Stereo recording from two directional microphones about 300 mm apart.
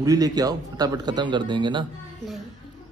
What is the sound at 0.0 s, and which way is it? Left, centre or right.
A man's voice, centre.